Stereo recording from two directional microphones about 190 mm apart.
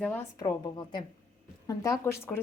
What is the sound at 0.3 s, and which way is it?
A woman's voice, 20° left (ahead or behind).